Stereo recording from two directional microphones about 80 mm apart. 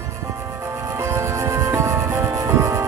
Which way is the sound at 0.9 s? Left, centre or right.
Right.